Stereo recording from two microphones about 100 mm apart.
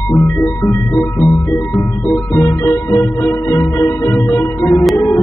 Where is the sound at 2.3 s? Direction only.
25° left (ahead or behind).